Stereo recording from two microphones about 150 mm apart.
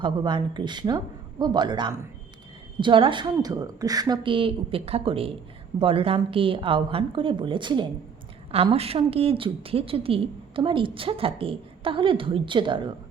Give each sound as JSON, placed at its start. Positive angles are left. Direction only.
{"t": 0.0, "sound": "a woman's voice", "side_deg": -30}